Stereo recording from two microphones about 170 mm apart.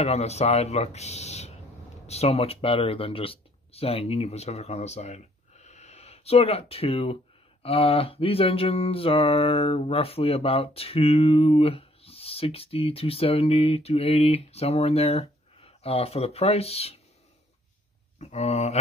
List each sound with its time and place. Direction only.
0.0 s mantra: 40° left (ahead or behind)
2.0 s speech: 35° left (ahead or behind)
7.6 s mantra: 35° left (ahead or behind)
18.2 s mantra: 40° left (ahead or behind)